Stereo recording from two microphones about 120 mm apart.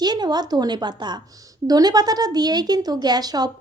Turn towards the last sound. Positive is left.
turn(degrees=-35)  # may be behind; listen again after turning